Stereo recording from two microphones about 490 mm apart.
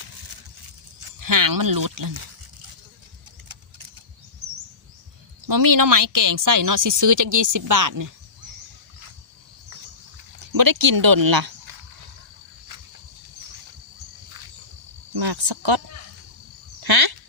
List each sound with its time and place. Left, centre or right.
1.2 s speech: right
5.5 s speech: right
10.4 s speech: right
15.1 s cricket: right
16.8 s a sound: right